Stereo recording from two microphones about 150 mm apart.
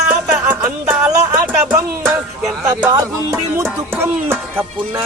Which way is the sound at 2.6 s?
25° right (ahead or behind).